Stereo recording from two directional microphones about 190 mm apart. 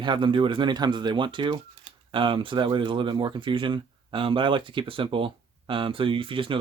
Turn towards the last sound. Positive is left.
turn(degrees=-25)  # may be behind; listen again after turning